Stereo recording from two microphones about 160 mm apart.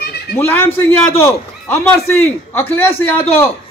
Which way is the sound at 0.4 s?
15° left (ahead or behind).